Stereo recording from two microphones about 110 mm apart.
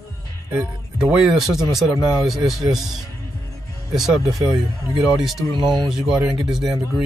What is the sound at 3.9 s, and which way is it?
Speech, centre (ahead or behind).